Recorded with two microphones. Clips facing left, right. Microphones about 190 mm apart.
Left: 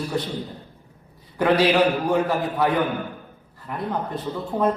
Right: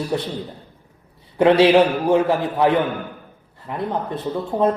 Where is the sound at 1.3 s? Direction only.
25° right (ahead or behind).